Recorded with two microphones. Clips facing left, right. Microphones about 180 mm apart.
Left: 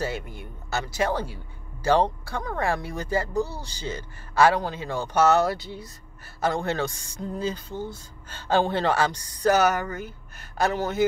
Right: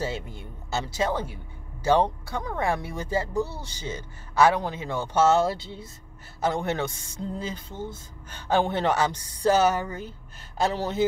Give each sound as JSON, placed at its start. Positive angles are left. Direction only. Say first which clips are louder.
{"t": 0.0, "sound": "speech", "louder": "left 1 dB", "side_deg": -25}